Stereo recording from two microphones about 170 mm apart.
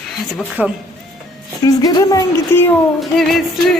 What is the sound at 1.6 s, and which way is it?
Speech, 20° left (ahead or behind).